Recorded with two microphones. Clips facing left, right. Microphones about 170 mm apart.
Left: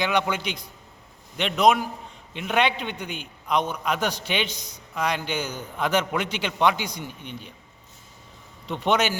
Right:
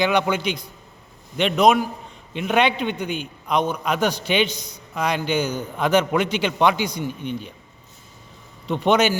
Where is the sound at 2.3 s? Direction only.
15° right (ahead or behind).